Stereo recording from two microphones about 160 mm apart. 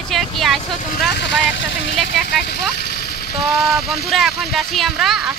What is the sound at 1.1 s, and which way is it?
Speech, 90° left.